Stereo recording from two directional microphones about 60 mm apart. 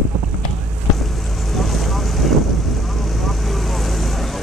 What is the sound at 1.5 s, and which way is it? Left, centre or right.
Boat, centre.